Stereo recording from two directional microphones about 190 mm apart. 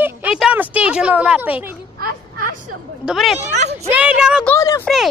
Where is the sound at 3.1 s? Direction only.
Centre (ahead or behind).